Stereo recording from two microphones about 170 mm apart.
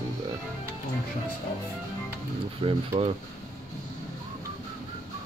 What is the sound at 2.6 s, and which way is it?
Speech, 35° right (ahead or behind).